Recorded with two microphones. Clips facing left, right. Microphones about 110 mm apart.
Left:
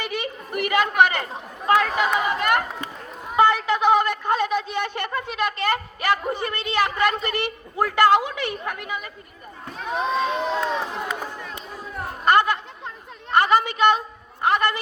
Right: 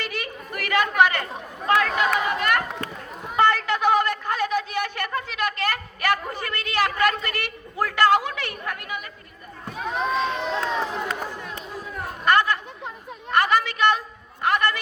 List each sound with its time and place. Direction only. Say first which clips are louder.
0.0 s chatter: left 3 dB; 20° left (ahead or behind)
2.0 s a woman's voice: left 1 dB; 15° left (ahead or behind)
10.0 s speech: left 2 dB; 5° left (ahead or behind)
12.2 s chatter: left 2 dB; 20° left (ahead or behind)
13.3 s a woman's voice: left 2 dB; 25° left (ahead or behind)